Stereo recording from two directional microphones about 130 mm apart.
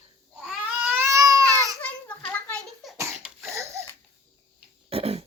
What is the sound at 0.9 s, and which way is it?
Baby cry, 20° right (ahead or behind).